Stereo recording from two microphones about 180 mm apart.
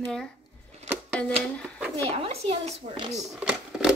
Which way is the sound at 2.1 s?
35° right (ahead or behind).